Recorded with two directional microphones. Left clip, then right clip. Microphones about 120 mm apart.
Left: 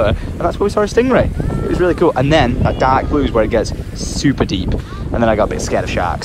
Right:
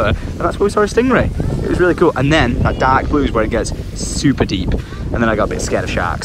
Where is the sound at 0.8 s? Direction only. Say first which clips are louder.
Left 3 dB; centre (ahead or behind).